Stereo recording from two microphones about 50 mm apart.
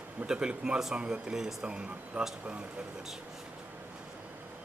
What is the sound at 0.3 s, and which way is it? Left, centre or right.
A man's voice, centre.